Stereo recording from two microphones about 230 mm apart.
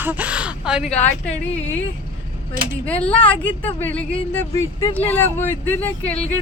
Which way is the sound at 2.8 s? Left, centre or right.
Centre.